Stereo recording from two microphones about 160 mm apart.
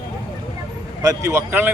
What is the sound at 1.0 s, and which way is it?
Speech, 20° right (ahead or behind).